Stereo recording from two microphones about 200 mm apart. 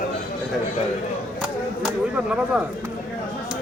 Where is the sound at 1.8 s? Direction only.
5° right (ahead or behind).